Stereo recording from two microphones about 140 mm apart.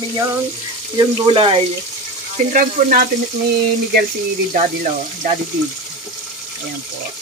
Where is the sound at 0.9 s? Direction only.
30° right (ahead or behind).